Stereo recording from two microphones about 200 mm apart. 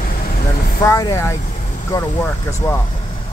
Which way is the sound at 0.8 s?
15° left (ahead or behind).